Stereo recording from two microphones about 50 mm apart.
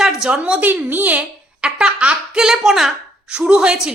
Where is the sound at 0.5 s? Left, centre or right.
Right.